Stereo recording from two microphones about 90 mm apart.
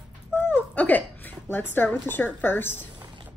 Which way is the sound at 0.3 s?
25° left (ahead or behind).